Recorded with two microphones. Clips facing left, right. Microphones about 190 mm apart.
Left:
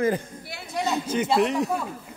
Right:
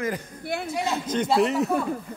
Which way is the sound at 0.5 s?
50° right (ahead or behind).